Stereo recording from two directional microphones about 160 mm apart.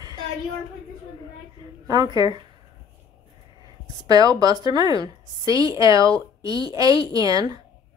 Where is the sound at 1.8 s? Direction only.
25° right (ahead or behind).